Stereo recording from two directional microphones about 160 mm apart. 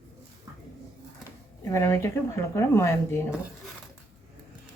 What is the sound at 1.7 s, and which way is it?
Speech, 15° left (ahead or behind).